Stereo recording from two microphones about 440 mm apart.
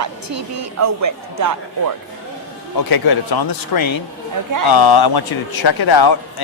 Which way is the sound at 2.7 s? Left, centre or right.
Left.